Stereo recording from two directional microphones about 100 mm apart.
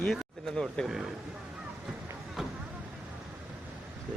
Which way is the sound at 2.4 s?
Centre (ahead or behind).